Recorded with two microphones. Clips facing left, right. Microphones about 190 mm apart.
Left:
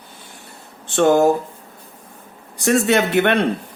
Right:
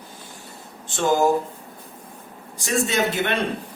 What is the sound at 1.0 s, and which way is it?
Speech, 65° left (ahead or behind).